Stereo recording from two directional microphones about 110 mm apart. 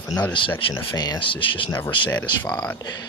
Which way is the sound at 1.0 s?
45° left (ahead or behind).